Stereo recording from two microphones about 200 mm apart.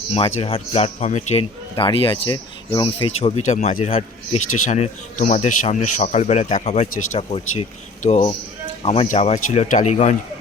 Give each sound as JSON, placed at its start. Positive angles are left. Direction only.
{"t": 0.1, "sound": "a man's voice", "side_deg": 30}
{"t": 4.4, "sound": "speech", "side_deg": 90}
{"t": 4.6, "sound": "a man's voice", "side_deg": 35}